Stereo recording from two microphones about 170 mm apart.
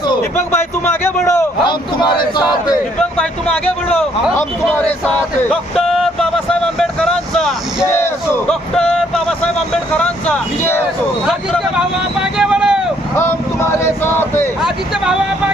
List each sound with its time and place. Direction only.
0.5 s a man's voice: 15° left (ahead or behind)
1.6 s a man's voice: 30° left (ahead or behind)
3.0 s a man's voice: 10° left (ahead or behind)
3.9 s speech: 5° right (ahead or behind)
4.9 s vehicle: 10° left (ahead or behind)
7.9 s a man's voice: 15° left (ahead or behind)
8.7 s a sound: 5° left (ahead or behind)
10.0 s speech: 10° left (ahead or behind)
12.4 s vehicle: 5° right (ahead or behind)
13.1 s a sound: 15° left (ahead or behind)
14.6 s speech: 5° right (ahead or behind)